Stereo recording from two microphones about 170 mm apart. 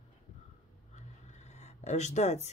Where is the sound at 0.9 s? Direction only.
40° left (ahead or behind).